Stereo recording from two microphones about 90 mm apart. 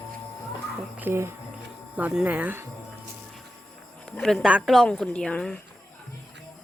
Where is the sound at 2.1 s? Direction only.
15° right (ahead or behind).